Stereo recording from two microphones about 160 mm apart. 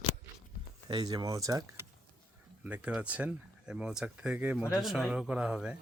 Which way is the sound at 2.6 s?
10° right (ahead or behind).